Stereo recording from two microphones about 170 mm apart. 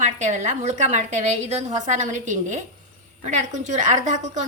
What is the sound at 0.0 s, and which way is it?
Speech, 45° right (ahead or behind).